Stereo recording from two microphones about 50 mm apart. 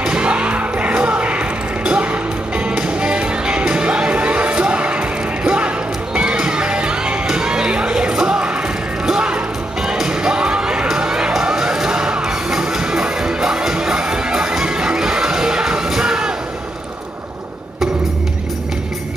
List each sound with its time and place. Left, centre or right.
0.0 s music: right
9.8 s music: centre